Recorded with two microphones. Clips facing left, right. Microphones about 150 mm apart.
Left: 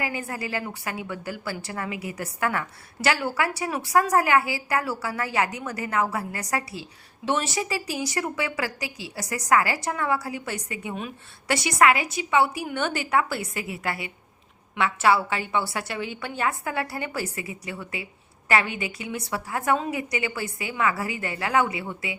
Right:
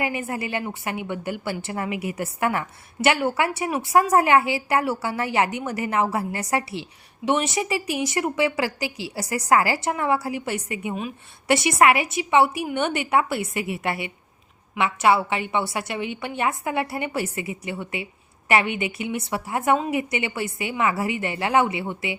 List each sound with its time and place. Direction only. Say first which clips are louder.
0.0 s a woman's voice: right 4 dB; 25° right (ahead or behind)